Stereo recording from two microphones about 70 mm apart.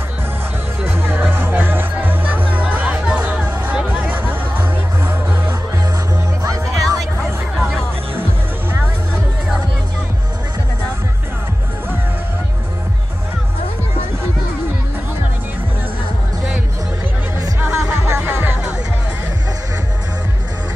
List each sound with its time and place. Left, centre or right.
0.8 s music: right
6.4 s music: right
17.6 s music: right